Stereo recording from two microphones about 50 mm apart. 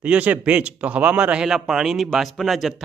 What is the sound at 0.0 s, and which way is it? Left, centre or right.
Speech, right.